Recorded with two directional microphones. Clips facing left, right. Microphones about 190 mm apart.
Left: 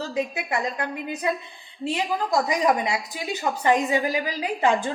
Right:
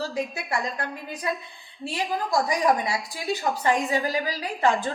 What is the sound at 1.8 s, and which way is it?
A woman's voice, 20° left (ahead or behind).